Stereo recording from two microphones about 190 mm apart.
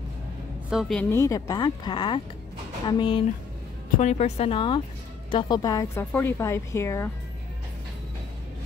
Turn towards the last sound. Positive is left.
turn(degrees=15)  # may be behind; listen again after turning